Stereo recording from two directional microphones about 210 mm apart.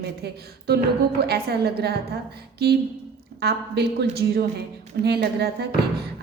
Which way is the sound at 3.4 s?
50° right (ahead or behind).